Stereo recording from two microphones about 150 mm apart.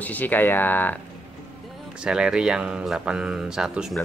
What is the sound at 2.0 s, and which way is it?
Speech, 5° right (ahead or behind).